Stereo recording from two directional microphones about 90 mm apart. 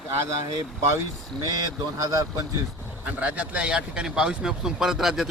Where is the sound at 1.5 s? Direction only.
45° right (ahead or behind).